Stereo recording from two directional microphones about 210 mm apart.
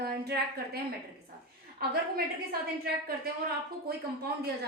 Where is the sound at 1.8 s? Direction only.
45° right (ahead or behind).